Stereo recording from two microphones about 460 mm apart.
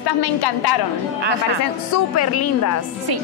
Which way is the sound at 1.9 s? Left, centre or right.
Left.